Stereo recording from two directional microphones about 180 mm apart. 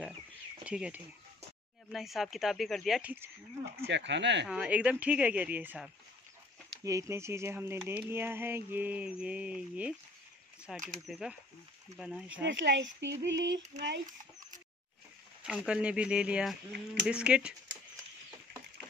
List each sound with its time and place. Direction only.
0.7 s speech: 5° right (ahead or behind)
3.8 s speech: 75° right (ahead or behind)
4.5 s speech: 5° right (ahead or behind)
12.4 s speech: 90° right
15.4 s speech: 5° right (ahead or behind)